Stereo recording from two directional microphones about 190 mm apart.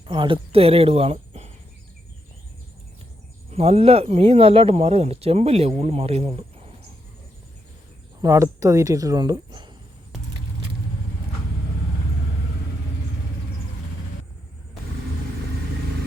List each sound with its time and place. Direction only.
0.1 s speech: 25° right (ahead or behind)
3.5 s speech: 30° right (ahead or behind)
8.2 s speech: 15° right (ahead or behind)